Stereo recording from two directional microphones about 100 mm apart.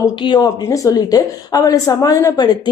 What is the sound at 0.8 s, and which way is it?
A woman's voice, 40° left (ahead or behind).